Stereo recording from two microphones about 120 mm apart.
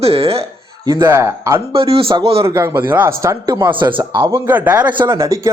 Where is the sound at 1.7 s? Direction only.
50° right (ahead or behind).